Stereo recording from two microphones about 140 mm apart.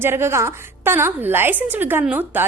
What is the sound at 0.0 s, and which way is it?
A woman's voice, 15° right (ahead or behind).